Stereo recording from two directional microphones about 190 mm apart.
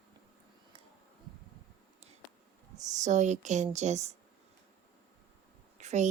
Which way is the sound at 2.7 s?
40° right (ahead or behind).